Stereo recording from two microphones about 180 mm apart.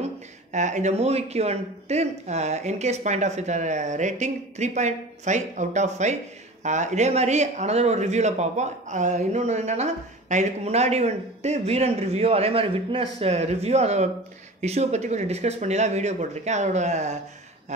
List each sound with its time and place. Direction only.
0.5 s speech: 40° right (ahead or behind)